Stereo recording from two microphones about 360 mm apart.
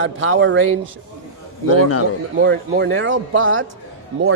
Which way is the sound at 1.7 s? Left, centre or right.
Left.